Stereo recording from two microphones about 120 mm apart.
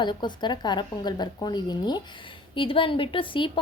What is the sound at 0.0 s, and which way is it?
A woman's voice, 40° left (ahead or behind).